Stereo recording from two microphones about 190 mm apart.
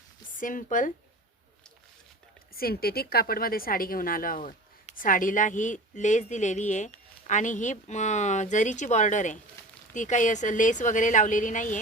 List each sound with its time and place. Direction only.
0.3 s speech: 45° left (ahead or behind)
2.6 s a woman's voice: 55° left (ahead or behind)